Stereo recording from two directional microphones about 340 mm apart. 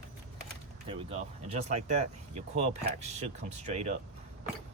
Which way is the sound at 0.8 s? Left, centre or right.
Centre.